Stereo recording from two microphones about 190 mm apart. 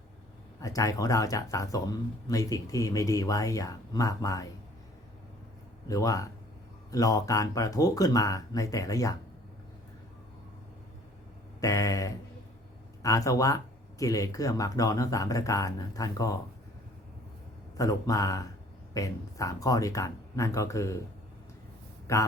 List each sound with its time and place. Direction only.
0.6 s speech: 15° left (ahead or behind)
5.9 s speech: 15° left (ahead or behind)
11.6 s speech: 15° left (ahead or behind)
17.7 s speech: 20° left (ahead or behind)
22.1 s speech: 15° left (ahead or behind)